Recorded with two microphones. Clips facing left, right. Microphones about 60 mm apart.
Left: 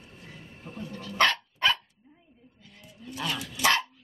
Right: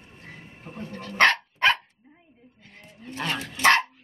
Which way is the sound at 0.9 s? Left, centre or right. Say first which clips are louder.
Right 5 dB; right.